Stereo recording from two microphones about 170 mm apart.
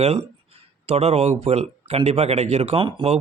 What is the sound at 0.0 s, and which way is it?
Speech, 40° right (ahead or behind).